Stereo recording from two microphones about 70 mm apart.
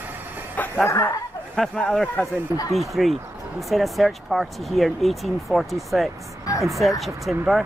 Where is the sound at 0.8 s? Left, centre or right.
Left.